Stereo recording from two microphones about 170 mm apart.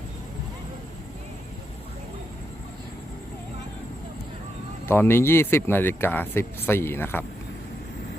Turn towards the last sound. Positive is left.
turn(degrees=15)  # may be behind; listen again after turning